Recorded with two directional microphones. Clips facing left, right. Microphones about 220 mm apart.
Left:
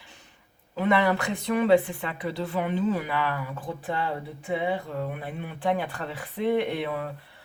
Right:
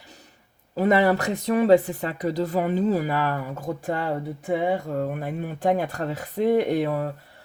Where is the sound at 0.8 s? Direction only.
40° right (ahead or behind).